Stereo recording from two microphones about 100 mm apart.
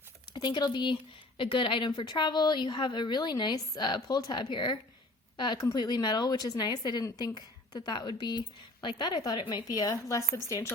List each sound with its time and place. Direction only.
0.3 s a woman's voice: 45° left (ahead or behind)
1.4 s a woman's voice: 60° left (ahead or behind); by 10.8 s 30° left (ahead or behind)